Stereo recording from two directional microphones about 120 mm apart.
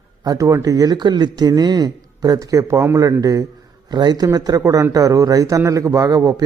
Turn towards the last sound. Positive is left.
turn(degrees=-30)  # may be behind; listen again after turning